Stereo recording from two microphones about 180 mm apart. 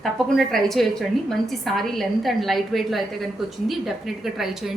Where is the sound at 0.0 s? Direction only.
Centre (ahead or behind).